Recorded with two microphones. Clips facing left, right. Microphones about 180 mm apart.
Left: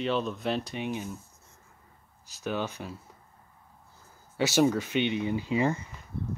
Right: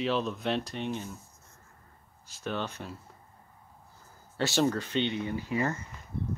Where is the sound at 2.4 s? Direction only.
5° left (ahead or behind).